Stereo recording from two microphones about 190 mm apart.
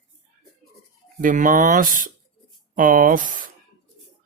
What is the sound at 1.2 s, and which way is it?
Mantra, 45° right (ahead or behind).